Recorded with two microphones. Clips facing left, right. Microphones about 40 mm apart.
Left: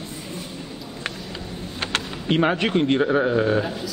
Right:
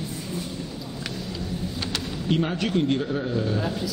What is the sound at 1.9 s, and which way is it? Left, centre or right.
Speech, left.